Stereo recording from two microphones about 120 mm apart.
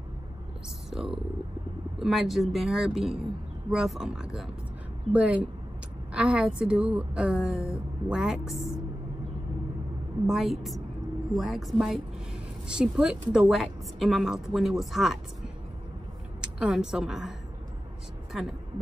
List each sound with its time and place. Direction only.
0.8 s a woman's voice: 5° right (ahead or behind)
7.5 s speech: 25° left (ahead or behind)
8.1 s a woman's voice: 5° right (ahead or behind)
10.2 s a woman's voice: centre (ahead or behind)
16.3 s a woman's voice: 5° right (ahead or behind)
18.3 s a woman's voice: centre (ahead or behind)